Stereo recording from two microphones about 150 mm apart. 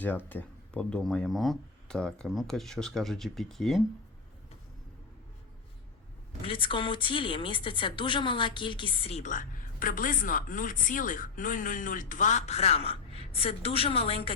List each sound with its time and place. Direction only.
0.3 s speech: 10° left (ahead or behind)
6.4 s a woman's voice: 35° left (ahead or behind)